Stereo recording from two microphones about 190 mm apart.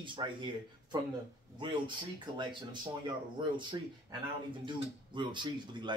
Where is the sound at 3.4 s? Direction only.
25° right (ahead or behind).